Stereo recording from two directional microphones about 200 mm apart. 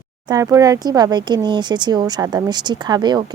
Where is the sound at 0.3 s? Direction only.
15° right (ahead or behind).